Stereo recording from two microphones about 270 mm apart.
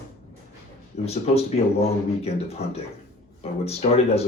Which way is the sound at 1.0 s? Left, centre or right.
Left.